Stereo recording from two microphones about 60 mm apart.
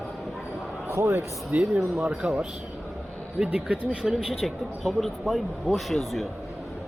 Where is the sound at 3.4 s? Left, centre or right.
Centre.